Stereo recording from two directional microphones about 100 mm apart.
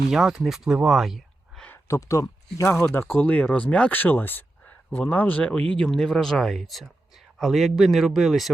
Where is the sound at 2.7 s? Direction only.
10° left (ahead or behind).